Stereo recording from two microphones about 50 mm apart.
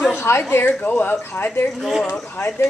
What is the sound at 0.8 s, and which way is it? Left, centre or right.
Speech, left.